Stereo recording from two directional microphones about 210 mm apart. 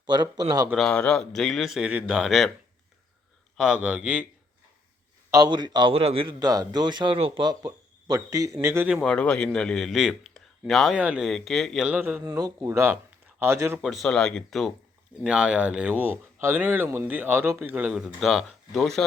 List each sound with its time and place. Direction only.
0.0 s speech: 20° right (ahead or behind)
0.7 s speech: 5° left (ahead or behind)
3.6 s speech: 5° right (ahead or behind)
5.3 s a man's voice: 20° right (ahead or behind)
9.0 s speech: 5° left (ahead or behind); by 13.7 s 10° right (ahead or behind)
13.8 s speech: centre (ahead or behind)